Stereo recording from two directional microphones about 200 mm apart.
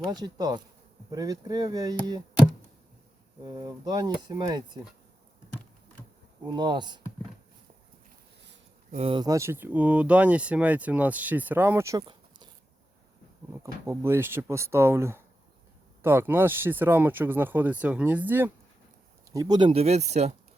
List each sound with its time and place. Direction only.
0.1 s speech: 20° right (ahead or behind)
3.4 s speech: 20° right (ahead or behind)
6.4 s speech: 20° right (ahead or behind)
8.9 s speech: 30° right (ahead or behind)
13.5 s speech: 15° right (ahead or behind); by 20.3 s 35° right (ahead or behind)